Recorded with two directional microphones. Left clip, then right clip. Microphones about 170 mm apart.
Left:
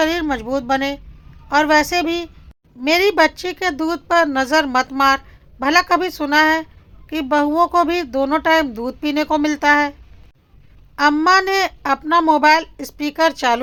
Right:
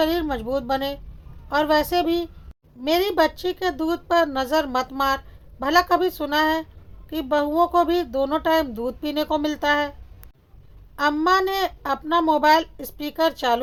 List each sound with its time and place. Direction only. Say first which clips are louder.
0.0 s speech: left 4 dB; 15° left (ahead or behind)
10.9 s speech: left 6 dB; 20° left (ahead or behind)